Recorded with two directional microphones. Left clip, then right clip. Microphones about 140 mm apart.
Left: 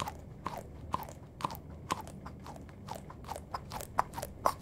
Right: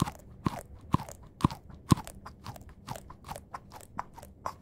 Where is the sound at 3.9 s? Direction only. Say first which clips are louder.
Left 7 dB; 25° left (ahead or behind).